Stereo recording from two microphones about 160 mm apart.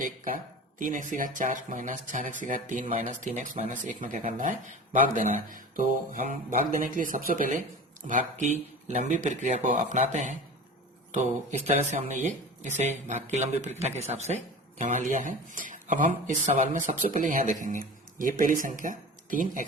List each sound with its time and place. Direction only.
0.8 s speech: 55° right (ahead or behind)